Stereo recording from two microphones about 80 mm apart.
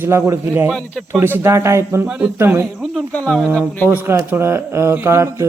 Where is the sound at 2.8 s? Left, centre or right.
Centre.